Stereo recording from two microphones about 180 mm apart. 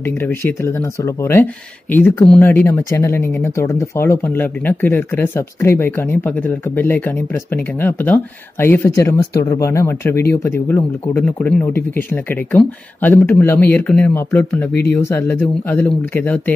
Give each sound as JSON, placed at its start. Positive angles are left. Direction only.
{"t": 1.0, "sound": "speech", "side_deg": 10}